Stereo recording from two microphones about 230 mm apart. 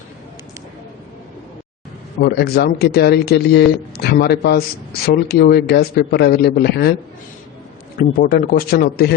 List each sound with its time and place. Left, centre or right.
2.2 s speech: left
7.9 s speech: left